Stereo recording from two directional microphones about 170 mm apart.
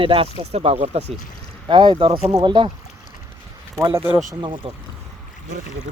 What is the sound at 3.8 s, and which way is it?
Speech, 15° right (ahead or behind).